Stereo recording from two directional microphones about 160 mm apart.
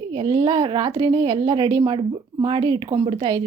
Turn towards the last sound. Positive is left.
turn(degrees=-30)  # may be behind; listen again after turning